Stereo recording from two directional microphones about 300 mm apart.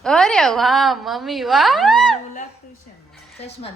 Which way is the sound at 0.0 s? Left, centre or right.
Centre.